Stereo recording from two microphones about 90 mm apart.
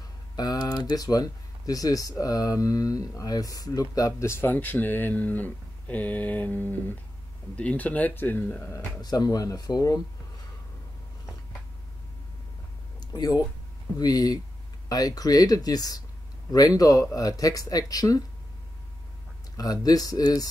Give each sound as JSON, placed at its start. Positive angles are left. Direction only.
{"t": 0.4, "sound": "speech", "side_deg": 45}
{"t": 4.3, "sound": "speech", "side_deg": 25}
{"t": 9.0, "sound": "speech", "side_deg": 45}
{"t": 13.0, "sound": "a sound", "side_deg": 45}
{"t": 13.9, "sound": "speech", "side_deg": 45}
{"t": 19.5, "sound": "speech", "side_deg": 45}